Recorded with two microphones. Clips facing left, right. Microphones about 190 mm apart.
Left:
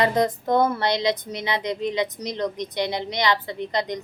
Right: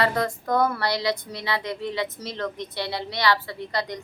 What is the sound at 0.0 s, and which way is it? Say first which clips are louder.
A woman's voice: left 3 dB; 20° left (ahead or behind).